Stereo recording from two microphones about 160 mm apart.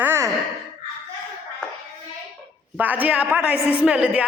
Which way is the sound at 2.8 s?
10° right (ahead or behind).